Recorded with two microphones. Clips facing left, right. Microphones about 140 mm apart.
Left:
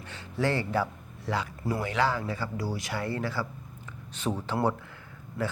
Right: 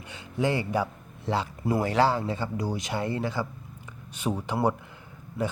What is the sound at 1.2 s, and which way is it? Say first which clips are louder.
Speech: right 3 dB; 30° right (ahead or behind).